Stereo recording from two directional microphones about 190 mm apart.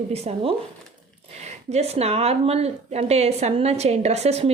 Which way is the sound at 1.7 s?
35° right (ahead or behind).